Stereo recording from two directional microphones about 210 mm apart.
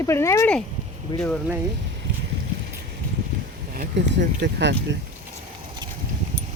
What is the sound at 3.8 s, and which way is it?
Speech, 55° right (ahead or behind).